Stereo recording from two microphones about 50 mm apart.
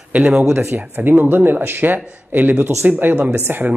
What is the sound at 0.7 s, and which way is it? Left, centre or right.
Speech, right.